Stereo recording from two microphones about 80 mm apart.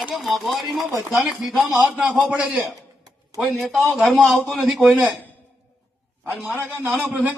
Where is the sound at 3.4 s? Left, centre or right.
Centre.